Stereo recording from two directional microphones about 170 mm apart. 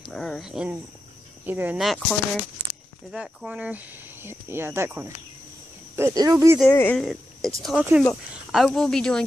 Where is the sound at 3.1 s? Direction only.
5° right (ahead or behind).